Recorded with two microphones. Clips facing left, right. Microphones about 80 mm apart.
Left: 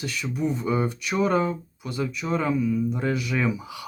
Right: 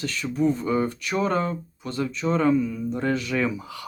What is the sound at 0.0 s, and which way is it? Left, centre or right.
Speech, centre.